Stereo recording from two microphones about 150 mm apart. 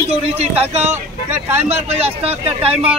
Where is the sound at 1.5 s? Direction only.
15° right (ahead or behind).